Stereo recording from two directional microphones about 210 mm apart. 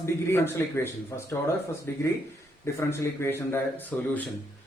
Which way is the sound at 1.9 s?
10° left (ahead or behind).